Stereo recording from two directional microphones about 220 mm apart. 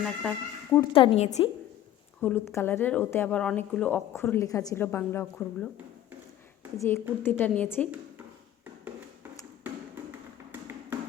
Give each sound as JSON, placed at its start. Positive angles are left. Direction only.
{"t": 0.0, "sound": "speech", "side_deg": 5}
{"t": 0.8, "sound": "a woman's voice", "side_deg": 25}
{"t": 2.2, "sound": "speech", "side_deg": 10}
{"t": 6.7, "sound": "speech", "side_deg": 10}
{"t": 10.5, "sound": "tap", "side_deg": -10}